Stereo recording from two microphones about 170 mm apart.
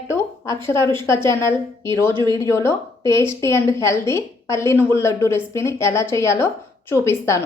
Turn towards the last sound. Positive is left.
turn(degrees=15)  # may be behind; listen again after turning